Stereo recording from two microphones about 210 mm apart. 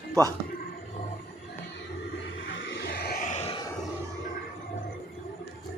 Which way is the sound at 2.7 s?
50° left (ahead or behind).